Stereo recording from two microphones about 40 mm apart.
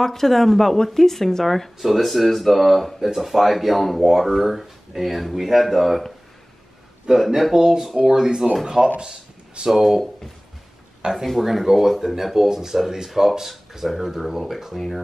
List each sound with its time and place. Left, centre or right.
0.0 s speech: centre
7.1 s speech: centre
9.0 s a sound: centre
9.7 s speech: centre
11.2 s speech: centre